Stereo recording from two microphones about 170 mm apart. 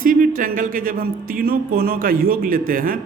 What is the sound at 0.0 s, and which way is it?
A man's voice, 55° right (ahead or behind).